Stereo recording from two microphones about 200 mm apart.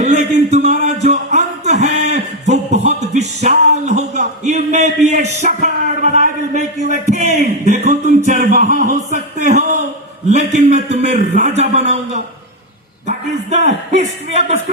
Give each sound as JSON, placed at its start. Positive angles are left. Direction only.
{"t": 0.2, "sound": "speech", "side_deg": -35}
{"t": 1.1, "sound": "music", "side_deg": -35}
{"t": 7.6, "sound": "a sound", "side_deg": -35}
{"t": 10.2, "sound": "a man's voice", "side_deg": -35}